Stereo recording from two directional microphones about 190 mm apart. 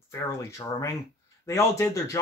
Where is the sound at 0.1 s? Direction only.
15° left (ahead or behind).